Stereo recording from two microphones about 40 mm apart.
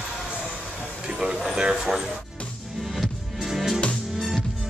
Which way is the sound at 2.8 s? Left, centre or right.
Centre.